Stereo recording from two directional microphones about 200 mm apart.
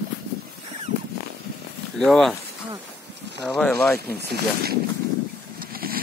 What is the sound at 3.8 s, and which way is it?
Speech, 5° left (ahead or behind).